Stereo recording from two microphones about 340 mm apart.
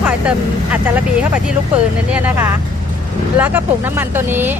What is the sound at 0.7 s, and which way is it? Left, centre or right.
Speech, centre.